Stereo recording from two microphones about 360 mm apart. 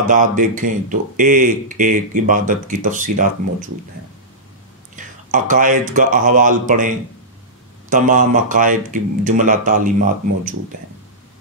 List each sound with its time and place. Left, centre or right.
0.1 s speech: right
4.9 s speech: right
7.9 s speech: right